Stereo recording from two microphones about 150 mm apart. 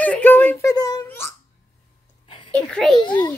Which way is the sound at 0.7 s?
25° left (ahead or behind).